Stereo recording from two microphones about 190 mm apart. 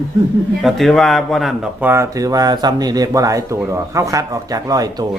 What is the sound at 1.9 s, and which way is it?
Speech, 15° right (ahead or behind).